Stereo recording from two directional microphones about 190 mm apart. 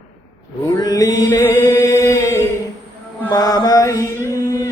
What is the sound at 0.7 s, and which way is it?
Mantra, 20° left (ahead or behind).